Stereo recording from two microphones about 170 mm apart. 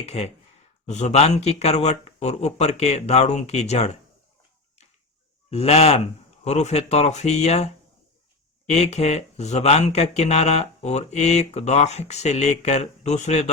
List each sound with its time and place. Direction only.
0.0 s speech: 40° left (ahead or behind)
5.5 s speech: 35° left (ahead or behind)